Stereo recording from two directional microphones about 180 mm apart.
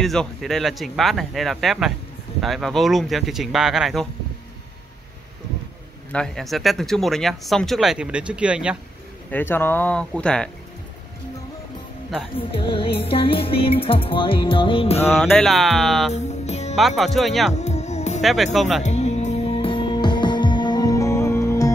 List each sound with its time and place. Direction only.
0.0 s speech: centre (ahead or behind)
6.1 s speech: 5° left (ahead or behind)
9.3 s speech: 10° left (ahead or behind)
12.4 s music: 30° left (ahead or behind)
15.0 s speech: 5° left (ahead or behind)
16.1 s music: 40° left (ahead or behind)
16.7 s speech: centre (ahead or behind)
17.6 s music: 40° left (ahead or behind)
18.2 s speech: centre (ahead or behind)
18.8 s music: 40° left (ahead or behind); by 21.7 s 15° left (ahead or behind)